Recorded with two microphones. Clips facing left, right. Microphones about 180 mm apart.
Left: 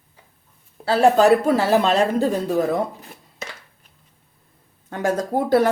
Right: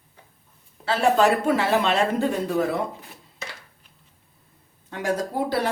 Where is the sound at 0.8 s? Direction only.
40° left (ahead or behind).